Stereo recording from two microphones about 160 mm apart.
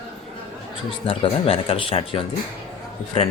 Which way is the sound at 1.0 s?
35° left (ahead or behind).